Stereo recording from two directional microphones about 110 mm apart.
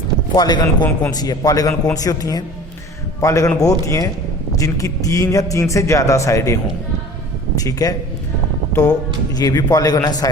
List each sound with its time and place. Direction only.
0.3 s a man's voice: 40° left (ahead or behind)